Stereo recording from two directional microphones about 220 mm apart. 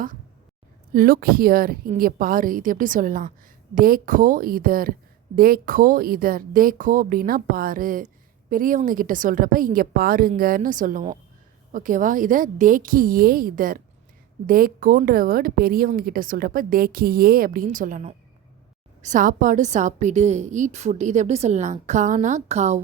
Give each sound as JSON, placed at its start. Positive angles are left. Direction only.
{"t": 0.9, "sound": "speech", "side_deg": -40}